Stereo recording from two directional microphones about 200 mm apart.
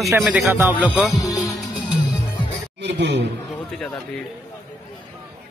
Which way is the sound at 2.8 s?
60° right (ahead or behind).